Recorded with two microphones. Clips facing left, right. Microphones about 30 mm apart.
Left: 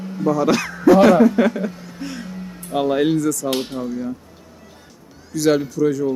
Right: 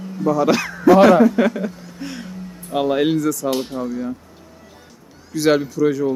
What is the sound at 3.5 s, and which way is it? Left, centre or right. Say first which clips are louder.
Speech: right 1 dB; left.